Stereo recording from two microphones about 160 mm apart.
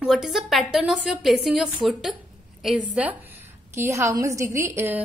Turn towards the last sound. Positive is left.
turn(degrees=-15)  # may be behind; listen again after turning